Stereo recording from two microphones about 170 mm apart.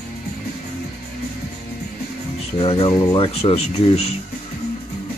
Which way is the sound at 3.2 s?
35° left (ahead or behind).